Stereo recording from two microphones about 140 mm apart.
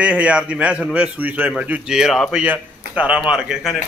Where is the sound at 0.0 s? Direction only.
5° right (ahead or behind).